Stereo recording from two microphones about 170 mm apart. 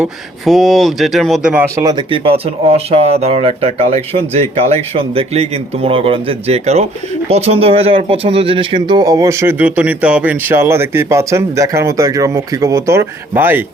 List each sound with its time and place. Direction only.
0.0 s speech: centre (ahead or behind)
1.8 s a man's voice: 25° right (ahead or behind)